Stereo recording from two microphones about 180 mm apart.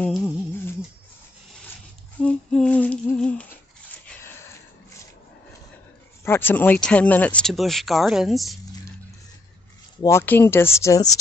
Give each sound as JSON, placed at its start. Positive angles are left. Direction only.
{"t": 0.0, "sound": "speech", "side_deg": 0}
{"t": 2.2, "sound": "humming", "side_deg": 5}
{"t": 6.2, "sound": "speech", "side_deg": 10}
{"t": 10.0, "sound": "humming", "side_deg": 10}
{"t": 10.8, "sound": "speech", "side_deg": 20}